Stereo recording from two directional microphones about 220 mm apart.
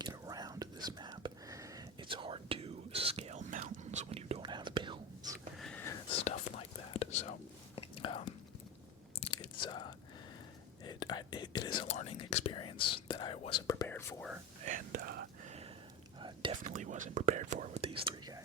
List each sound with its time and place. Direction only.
0.0 s whispering: 20° right (ahead or behind)
5.5 s whispering: 5° left (ahead or behind)
6.1 s whispering: 25° left (ahead or behind)
9.6 s whispering: 20° left (ahead or behind)
14.6 s whispering: 35° right (ahead or behind)
16.2 s whispering: 20° right (ahead or behind)
16.6 s whispering: 35° right (ahead or behind)